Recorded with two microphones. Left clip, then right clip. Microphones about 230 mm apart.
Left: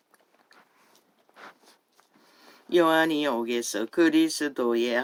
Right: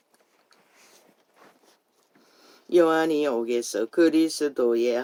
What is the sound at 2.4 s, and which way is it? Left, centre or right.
Speech, left.